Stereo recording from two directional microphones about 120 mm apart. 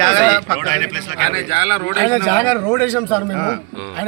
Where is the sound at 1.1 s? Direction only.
55° left (ahead or behind).